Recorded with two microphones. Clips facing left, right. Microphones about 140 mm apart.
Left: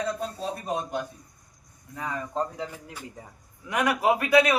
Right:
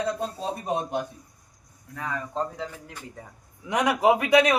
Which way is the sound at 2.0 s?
15° left (ahead or behind).